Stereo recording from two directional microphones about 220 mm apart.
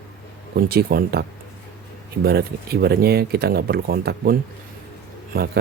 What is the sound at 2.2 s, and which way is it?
Speech, 45° right (ahead or behind).